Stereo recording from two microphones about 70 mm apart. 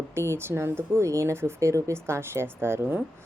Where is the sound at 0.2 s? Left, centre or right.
Right.